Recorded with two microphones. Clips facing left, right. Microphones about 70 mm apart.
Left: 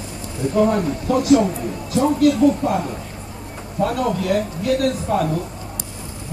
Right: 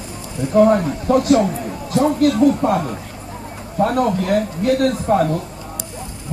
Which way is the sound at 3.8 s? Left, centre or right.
Right.